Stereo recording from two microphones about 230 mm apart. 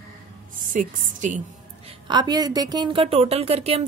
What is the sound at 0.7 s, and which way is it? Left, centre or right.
Speech, right.